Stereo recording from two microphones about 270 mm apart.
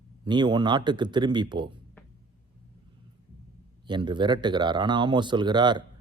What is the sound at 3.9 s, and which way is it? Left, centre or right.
Speech, centre.